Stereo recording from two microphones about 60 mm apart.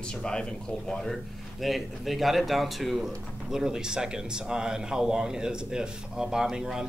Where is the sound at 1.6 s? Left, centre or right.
Centre.